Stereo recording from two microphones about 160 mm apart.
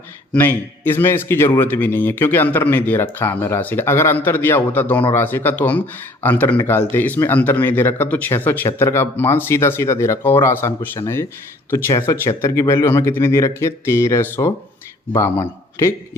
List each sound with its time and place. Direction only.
0.3 s speech: 15° left (ahead or behind)